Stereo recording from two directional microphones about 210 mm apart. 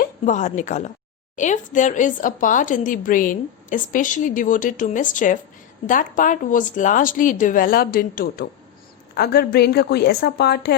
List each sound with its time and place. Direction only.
0.0 s a woman's voice: 35° left (ahead or behind); by 10.8 s 50° left (ahead or behind)